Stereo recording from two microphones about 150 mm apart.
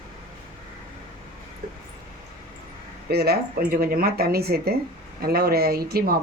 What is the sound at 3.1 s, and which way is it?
Speech, 90° right.